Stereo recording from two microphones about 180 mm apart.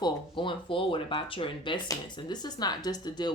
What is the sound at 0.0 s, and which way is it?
Speech, 25° left (ahead or behind).